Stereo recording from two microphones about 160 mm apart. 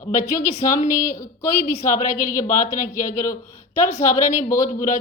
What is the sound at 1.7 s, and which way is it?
A woman's voice, 55° left (ahead or behind).